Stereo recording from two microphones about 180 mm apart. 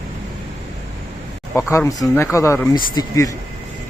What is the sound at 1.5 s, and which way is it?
Speech, 15° left (ahead or behind).